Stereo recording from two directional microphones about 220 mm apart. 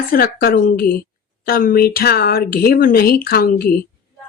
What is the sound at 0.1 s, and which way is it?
Speech, 45° left (ahead or behind).